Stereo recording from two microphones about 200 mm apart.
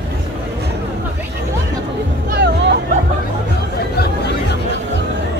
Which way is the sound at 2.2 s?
55° right (ahead or behind).